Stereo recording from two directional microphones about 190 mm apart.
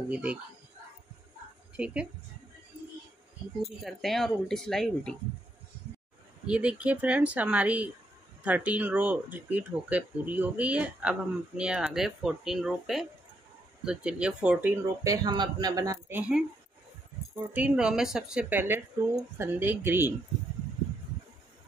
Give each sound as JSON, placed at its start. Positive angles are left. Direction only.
{"t": 0.1, "sound": "speech", "side_deg": -5}
{"t": 3.8, "sound": "speech", "side_deg": 0}
{"t": 6.4, "sound": "speech", "side_deg": -5}
{"t": 15.2, "sound": "speech", "side_deg": -25}
{"t": 17.5, "sound": "speech", "side_deg": -5}